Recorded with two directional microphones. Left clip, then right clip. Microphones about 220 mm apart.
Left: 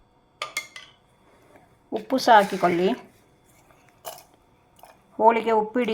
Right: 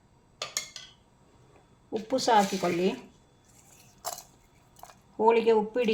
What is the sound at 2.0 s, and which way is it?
Speech, 15° left (ahead or behind).